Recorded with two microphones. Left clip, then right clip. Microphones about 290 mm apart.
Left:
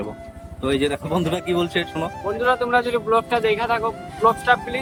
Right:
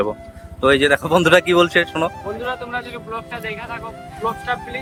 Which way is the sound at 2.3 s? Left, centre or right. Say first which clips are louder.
Left 7 dB; centre.